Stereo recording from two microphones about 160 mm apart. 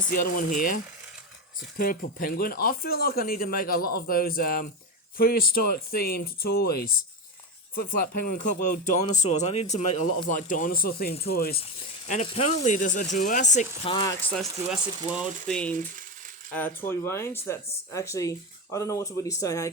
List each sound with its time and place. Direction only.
0.1 s speech: 60° left (ahead or behind)
1.8 s speech: 60° left (ahead or behind)
11.5 s speech: 40° left (ahead or behind)
13.8 s speech: 30° left (ahead or behind)
14.2 s speech: 10° left (ahead or behind)